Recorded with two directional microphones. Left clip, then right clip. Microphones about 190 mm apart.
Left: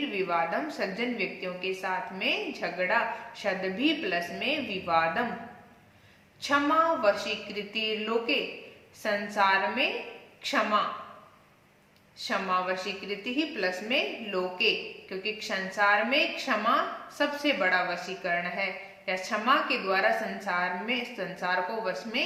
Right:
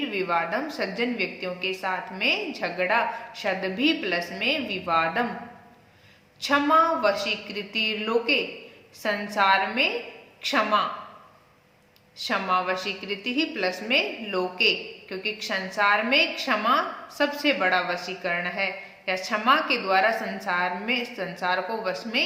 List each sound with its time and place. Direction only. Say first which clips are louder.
0.1 s a woman's voice: right 3 dB; 25° right (ahead or behind)
6.4 s a woman's voice: right 4 dB; 30° right (ahead or behind)
12.1 s a woman's voice: right 4 dB; 30° right (ahead or behind)